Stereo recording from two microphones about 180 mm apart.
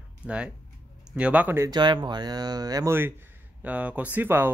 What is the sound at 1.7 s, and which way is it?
Speech, 25° right (ahead or behind).